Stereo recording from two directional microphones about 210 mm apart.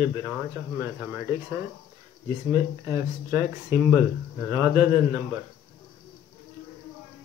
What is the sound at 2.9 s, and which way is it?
Speech, 15° right (ahead or behind).